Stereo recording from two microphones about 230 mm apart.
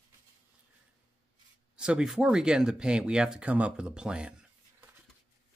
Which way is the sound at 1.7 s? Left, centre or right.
Centre.